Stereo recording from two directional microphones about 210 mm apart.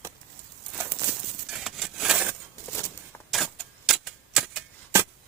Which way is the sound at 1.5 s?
Centre (ahead or behind).